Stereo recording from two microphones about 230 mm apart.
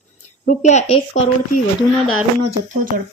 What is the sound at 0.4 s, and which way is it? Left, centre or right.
Speech, left.